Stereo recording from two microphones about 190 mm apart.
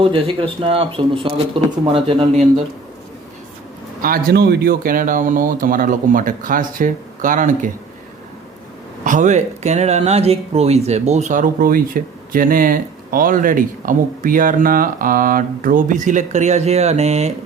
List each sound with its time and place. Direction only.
0.0 s speech: 30° right (ahead or behind)
4.0 s speech: 50° right (ahead or behind)
9.0 s speech: 40° right (ahead or behind)